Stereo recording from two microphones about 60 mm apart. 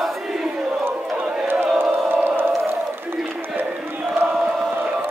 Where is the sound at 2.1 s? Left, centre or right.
Right.